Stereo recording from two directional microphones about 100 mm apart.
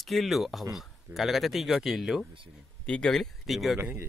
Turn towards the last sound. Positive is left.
turn(degrees=-25)  # may be behind; listen again after turning